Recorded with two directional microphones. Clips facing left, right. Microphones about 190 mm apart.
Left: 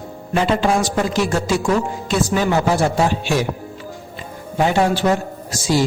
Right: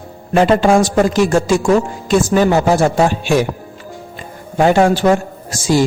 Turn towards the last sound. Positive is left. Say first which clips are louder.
# right 4 dB
turn(degrees=-50)  # may be behind; listen again after turning